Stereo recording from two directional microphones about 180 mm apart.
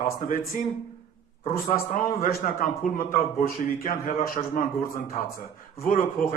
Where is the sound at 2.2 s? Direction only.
50° left (ahead or behind).